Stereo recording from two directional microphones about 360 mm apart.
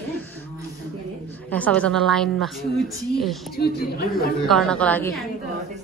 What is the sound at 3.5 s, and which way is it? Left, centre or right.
Speech, left.